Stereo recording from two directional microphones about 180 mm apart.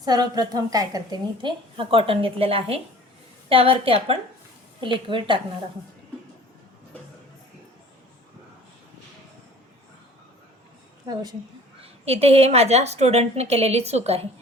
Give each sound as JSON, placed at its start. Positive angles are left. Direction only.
{"t": 0.0, "sound": "a woman's voice", "side_deg": -20}
{"t": 11.0, "sound": "a woman's voice", "side_deg": -20}
{"t": 11.8, "sound": "a woman's voice", "side_deg": -35}